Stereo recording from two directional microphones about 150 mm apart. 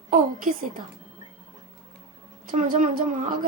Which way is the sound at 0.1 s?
60° right (ahead or behind).